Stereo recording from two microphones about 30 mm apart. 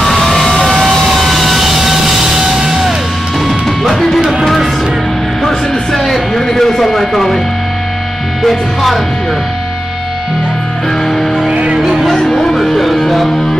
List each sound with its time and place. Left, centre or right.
0.0 s vehicle: centre
1.0 s music: centre
3.4 s music: centre
4.2 s music: centre
5.9 s music: centre
8.4 s music: centre
11.5 s music: right
12.1 s music: centre